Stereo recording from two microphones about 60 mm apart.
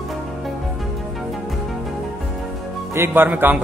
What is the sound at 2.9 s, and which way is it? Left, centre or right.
Speech, right.